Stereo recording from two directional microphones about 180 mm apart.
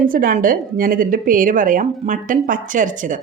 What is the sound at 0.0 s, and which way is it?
Speech, 50° right (ahead or behind).